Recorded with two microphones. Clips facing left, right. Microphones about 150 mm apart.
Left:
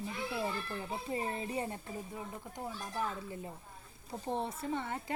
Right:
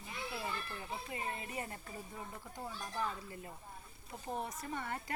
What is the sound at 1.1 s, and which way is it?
Speech, 30° left (ahead or behind).